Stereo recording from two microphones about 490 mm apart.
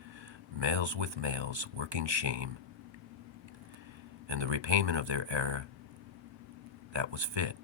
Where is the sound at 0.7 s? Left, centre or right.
Right.